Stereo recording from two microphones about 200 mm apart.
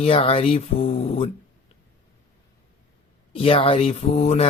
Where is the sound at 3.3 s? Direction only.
25° left (ahead or behind).